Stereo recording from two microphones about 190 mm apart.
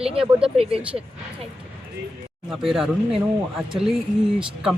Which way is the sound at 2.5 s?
Centre (ahead or behind).